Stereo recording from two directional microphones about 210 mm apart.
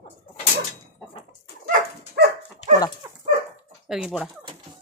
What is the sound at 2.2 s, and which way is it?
Dog, 50° right (ahead or behind).